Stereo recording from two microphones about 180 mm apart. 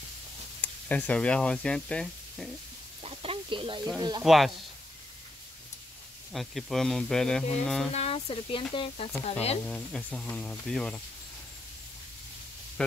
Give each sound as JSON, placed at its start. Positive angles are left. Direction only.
{"t": 0.6, "sound": "speech", "side_deg": 10}
{"t": 3.0, "sound": "a sound", "side_deg": -35}
{"t": 4.2, "sound": "speech", "side_deg": 0}
{"t": 6.3, "sound": "speech", "side_deg": 0}
{"t": 7.9, "sound": "speech", "side_deg": 35}
{"t": 9.7, "sound": "speech", "side_deg": 5}